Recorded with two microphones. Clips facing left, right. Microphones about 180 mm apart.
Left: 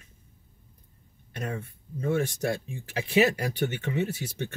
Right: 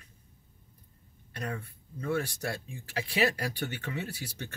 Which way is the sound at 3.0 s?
20° left (ahead or behind).